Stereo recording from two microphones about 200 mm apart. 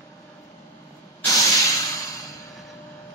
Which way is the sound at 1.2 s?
15° left (ahead or behind).